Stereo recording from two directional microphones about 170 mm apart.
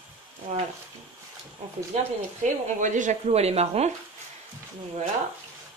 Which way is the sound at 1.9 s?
45° right (ahead or behind).